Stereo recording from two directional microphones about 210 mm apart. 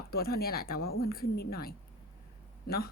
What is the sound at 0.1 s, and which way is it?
A woman's voice, 45° left (ahead or behind).